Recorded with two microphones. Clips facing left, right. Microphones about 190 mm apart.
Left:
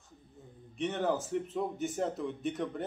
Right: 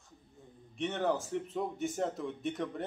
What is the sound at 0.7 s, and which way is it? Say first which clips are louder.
Speech: left 1 dB; centre (ahead or behind).